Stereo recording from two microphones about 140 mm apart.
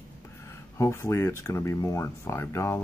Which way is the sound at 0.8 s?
20° left (ahead or behind).